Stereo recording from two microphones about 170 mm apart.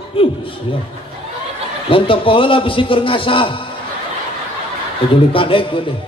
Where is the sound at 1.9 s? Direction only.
30° left (ahead or behind).